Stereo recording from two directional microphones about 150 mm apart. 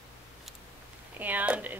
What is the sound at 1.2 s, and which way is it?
Speech, 10° right (ahead or behind).